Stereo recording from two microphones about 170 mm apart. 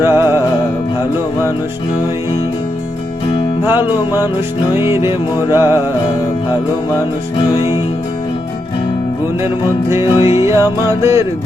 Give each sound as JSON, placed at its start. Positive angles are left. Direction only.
{"t": 0.0, "sound": "music", "side_deg": -15}
{"t": 4.7, "sound": "music", "side_deg": -15}
{"t": 9.9, "sound": "music", "side_deg": -15}